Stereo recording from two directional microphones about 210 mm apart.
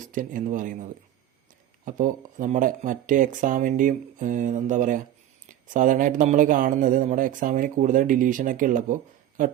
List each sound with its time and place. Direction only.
0.0 s a man's voice: 40° right (ahead or behind)